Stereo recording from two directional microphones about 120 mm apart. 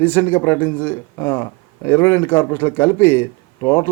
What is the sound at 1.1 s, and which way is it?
Speech, 30° left (ahead or behind).